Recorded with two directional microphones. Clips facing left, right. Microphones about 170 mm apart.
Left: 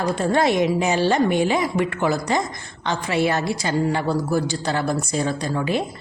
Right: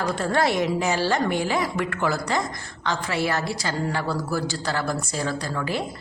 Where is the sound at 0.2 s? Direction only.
20° left (ahead or behind).